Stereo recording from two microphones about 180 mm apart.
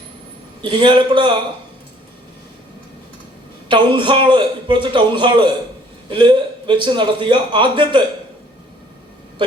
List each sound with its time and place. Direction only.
0.6 s a man's voice: 25° right (ahead or behind)
3.7 s a man's voice: 25° right (ahead or behind)